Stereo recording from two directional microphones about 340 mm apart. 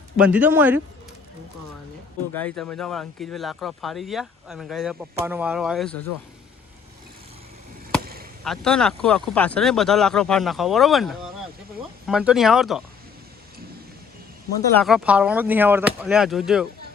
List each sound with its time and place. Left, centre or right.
0.2 s speech: centre
2.3 s speech: centre
8.0 s chop: right
8.4 s speech: centre
14.5 s speech: centre